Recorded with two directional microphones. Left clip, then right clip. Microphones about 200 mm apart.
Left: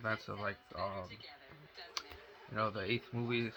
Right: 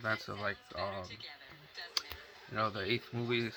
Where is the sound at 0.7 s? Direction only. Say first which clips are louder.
Right 2 dB; 25° right (ahead or behind).